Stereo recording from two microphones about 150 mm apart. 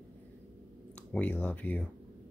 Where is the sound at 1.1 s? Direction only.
10° left (ahead or behind).